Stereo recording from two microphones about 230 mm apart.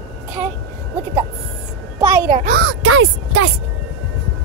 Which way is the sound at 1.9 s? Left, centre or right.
Centre.